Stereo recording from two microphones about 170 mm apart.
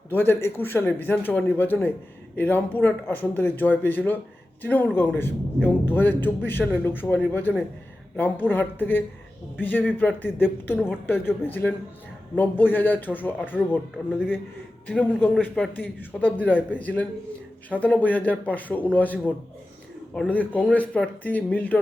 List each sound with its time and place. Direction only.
0.1 s a man's voice: 10° left (ahead or behind)
12.7 s a man's voice: 10° left (ahead or behind)
14.8 s a man's voice: 10° left (ahead or behind)